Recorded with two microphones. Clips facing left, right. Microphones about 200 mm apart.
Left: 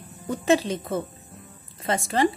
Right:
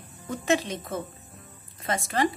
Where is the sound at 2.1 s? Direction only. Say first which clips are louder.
Left 4 dB; 30° left (ahead or behind).